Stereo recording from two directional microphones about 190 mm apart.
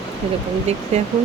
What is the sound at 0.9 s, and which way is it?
Speech, 35° right (ahead or behind).